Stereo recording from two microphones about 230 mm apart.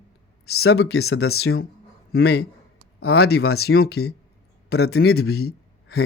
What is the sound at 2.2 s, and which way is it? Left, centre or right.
Speech, left.